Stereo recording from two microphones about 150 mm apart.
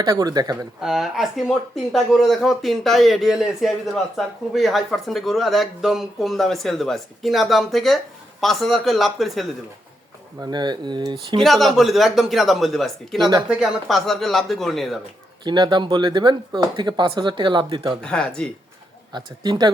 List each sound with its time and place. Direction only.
0.0 s speech: 25° right (ahead or behind)
0.8 s speech: centre (ahead or behind)
10.4 s speech: 30° right (ahead or behind)
11.4 s speech: centre (ahead or behind)
15.4 s speech: 30° right (ahead or behind)
18.0 s speech: 5° left (ahead or behind)
19.1 s speech: 30° right (ahead or behind)